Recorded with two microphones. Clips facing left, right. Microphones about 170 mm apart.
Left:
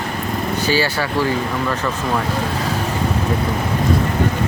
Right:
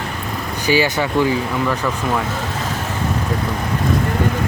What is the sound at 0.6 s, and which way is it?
Speech, 15° right (ahead or behind).